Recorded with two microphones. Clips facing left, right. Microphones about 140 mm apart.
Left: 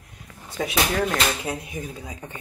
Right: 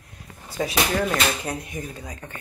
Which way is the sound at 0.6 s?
Centre (ahead or behind).